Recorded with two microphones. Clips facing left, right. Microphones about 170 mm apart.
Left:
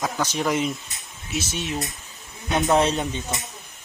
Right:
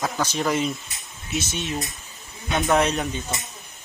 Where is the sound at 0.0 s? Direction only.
15° left (ahead or behind).